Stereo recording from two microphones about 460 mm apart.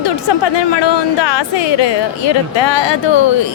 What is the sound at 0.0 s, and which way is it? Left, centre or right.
A woman's voice, left.